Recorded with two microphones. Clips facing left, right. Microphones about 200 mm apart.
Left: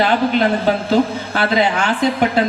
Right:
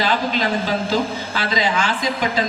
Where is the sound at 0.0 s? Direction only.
60° left (ahead or behind).